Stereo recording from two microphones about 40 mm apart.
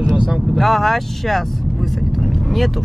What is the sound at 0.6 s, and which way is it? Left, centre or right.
Speech, centre.